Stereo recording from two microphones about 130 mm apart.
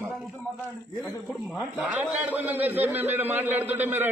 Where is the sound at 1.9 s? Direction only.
15° right (ahead or behind).